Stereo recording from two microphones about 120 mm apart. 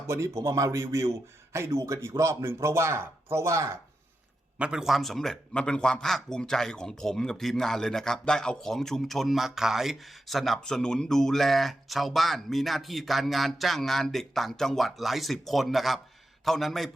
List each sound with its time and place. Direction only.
0.1 s a man's voice: 25° right (ahead or behind)
4.5 s a man's voice: 10° right (ahead or behind)